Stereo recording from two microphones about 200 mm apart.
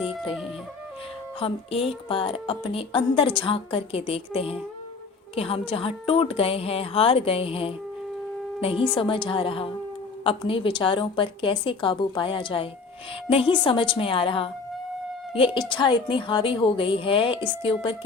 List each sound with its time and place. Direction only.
1.4 s a woman's voice: 25° left (ahead or behind)
15.7 s a woman's voice: 25° left (ahead or behind)